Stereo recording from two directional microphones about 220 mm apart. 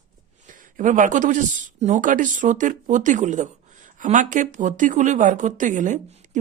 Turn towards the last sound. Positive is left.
turn(degrees=-30)  # may be behind; listen again after turning